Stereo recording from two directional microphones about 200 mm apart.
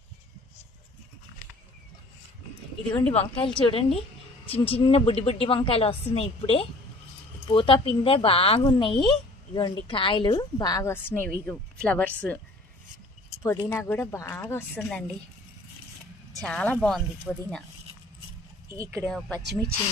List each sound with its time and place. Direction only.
3.1 s a woman's voice: 25° left (ahead or behind); by 12.1 s 10° left (ahead or behind)
13.4 s speech: 15° left (ahead or behind)
16.4 s speech: 5° left (ahead or behind)
18.7 s speech: 15° right (ahead or behind)
19.0 s speech: centre (ahead or behind)